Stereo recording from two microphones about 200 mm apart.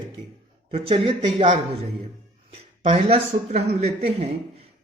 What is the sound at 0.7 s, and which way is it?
Speech, 30° right (ahead or behind).